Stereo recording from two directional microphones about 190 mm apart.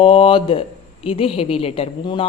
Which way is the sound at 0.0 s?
30° left (ahead or behind).